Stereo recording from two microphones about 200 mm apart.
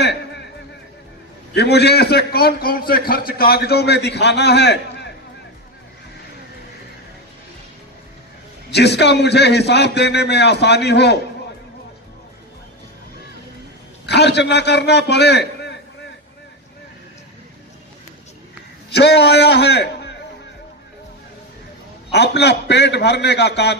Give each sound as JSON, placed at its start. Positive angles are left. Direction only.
{"t": 0.0, "sound": "a sound", "side_deg": 60}
{"t": 1.5, "sound": "a man's voice", "side_deg": 55}
{"t": 8.6, "sound": "a man's voice", "side_deg": 55}
{"t": 14.0, "sound": "a man's voice", "side_deg": 55}
{"t": 18.9, "sound": "a man's voice", "side_deg": 55}
{"t": 22.1, "sound": "a man's voice", "side_deg": 55}